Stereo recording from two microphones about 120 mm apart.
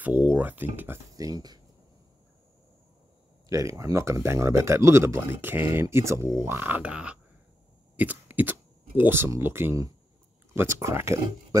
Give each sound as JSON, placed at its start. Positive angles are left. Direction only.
{"t": 0.0, "sound": "speech", "side_deg": -15}
{"t": 1.1, "sound": "speech", "side_deg": -30}
{"t": 3.4, "sound": "speech", "side_deg": -25}